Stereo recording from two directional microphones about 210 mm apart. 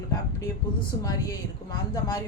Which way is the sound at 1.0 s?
15° left (ahead or behind).